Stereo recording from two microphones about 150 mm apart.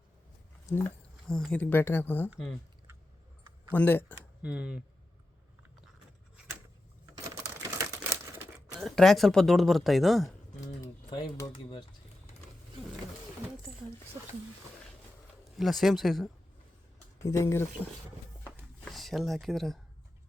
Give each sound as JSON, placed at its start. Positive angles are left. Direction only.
{"t": 0.7, "sound": "speech", "side_deg": 15}
{"t": 1.3, "sound": "speech", "side_deg": 5}
{"t": 2.3, "sound": "speech", "side_deg": 0}
{"t": 3.8, "sound": "speech", "side_deg": 15}
{"t": 4.4, "sound": "speech", "side_deg": -5}
{"t": 7.8, "sound": "crumpling", "side_deg": -20}
{"t": 8.7, "sound": "speech", "side_deg": 0}
{"t": 11.5, "sound": "speech", "side_deg": 30}
{"t": 15.5, "sound": "speech", "side_deg": 0}
{"t": 17.2, "sound": "speech", "side_deg": 20}
{"t": 18.9, "sound": "speech", "side_deg": 0}